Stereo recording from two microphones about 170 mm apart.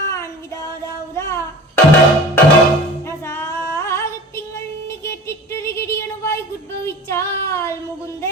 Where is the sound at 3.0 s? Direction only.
15° left (ahead or behind).